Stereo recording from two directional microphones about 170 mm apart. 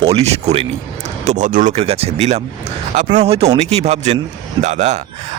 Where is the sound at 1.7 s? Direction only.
35° right (ahead or behind).